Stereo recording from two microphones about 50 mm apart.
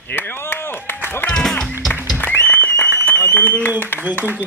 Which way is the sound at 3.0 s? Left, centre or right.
Left.